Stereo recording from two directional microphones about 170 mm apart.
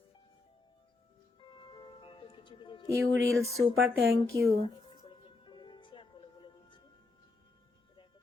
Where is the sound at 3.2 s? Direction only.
20° right (ahead or behind).